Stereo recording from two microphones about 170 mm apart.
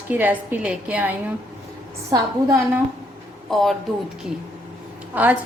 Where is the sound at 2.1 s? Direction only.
20° right (ahead or behind).